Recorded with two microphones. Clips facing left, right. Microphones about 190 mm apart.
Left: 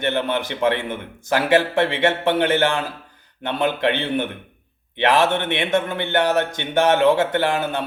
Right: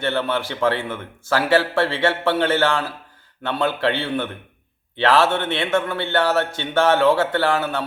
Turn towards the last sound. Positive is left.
turn(degrees=20)  # may be behind; listen again after turning